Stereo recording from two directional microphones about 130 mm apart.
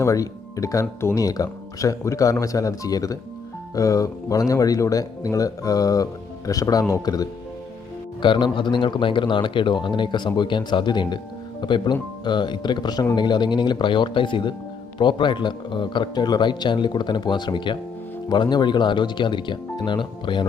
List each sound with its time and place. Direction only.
0.0 s a man's voice: 25° left (ahead or behind)